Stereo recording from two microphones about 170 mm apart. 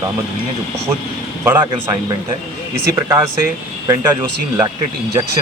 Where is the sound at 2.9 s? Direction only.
20° right (ahead or behind).